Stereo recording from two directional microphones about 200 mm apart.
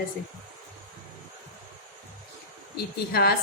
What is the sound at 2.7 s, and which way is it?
Speech, 50° left (ahead or behind).